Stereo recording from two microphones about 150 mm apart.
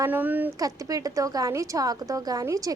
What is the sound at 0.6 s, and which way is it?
A woman's voice, 25° right (ahead or behind).